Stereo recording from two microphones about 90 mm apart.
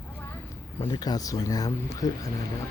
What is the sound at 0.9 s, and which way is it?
Speech, 45° left (ahead or behind).